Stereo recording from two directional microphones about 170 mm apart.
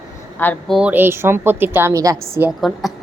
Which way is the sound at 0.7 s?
10° right (ahead or behind).